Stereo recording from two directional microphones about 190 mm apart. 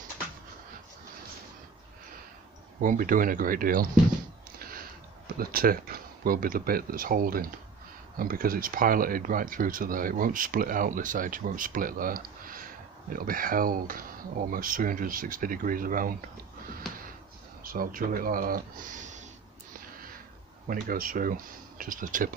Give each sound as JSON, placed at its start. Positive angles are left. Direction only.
{"t": 2.8, "sound": "speech", "side_deg": -45}
{"t": 4.6, "sound": "a sound", "side_deg": -50}
{"t": 5.4, "sound": "speech", "side_deg": -50}
{"t": 17.6, "sound": "speech", "side_deg": -50}
{"t": 20.6, "sound": "speech", "side_deg": -50}